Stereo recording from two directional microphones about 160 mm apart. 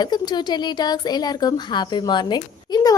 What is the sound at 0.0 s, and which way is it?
Speech, 25° left (ahead or behind).